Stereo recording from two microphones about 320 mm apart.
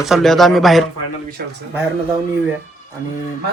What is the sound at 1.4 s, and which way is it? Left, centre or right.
Speech, right.